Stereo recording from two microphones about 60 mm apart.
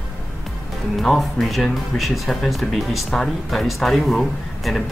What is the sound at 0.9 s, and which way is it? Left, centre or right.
Speech, centre.